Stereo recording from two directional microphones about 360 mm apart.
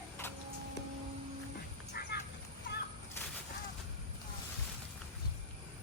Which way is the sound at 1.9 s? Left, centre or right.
Left.